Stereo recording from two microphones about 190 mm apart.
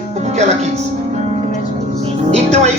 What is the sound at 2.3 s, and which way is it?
Speech, 35° right (ahead or behind).